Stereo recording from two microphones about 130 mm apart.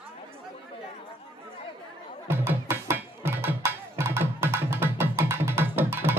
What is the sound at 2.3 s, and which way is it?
Music, 20° right (ahead or behind).